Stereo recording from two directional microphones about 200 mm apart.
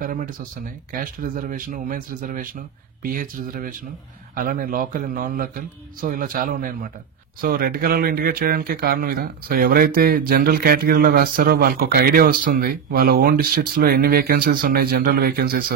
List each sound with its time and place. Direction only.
0.0 s speech: 45° right (ahead or behind)